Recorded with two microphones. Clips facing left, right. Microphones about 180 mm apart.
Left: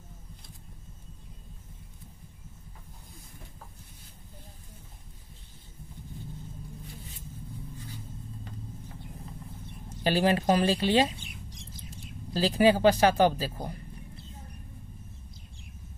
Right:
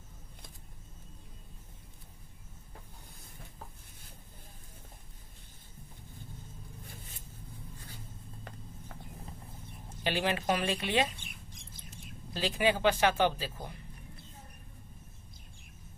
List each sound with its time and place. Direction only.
10.0 s speech: 35° left (ahead or behind)
11.1 s rodents: 55° right (ahead or behind)
12.4 s speech: 35° left (ahead or behind)